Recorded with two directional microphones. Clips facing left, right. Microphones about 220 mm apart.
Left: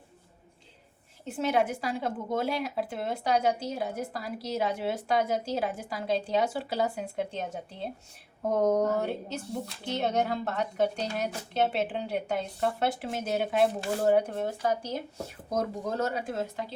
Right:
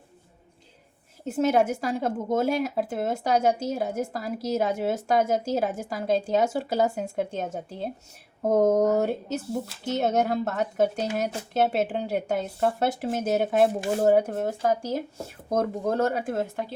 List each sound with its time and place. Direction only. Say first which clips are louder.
1.2 s a woman's voice: right 5 dB; 45° right (ahead or behind)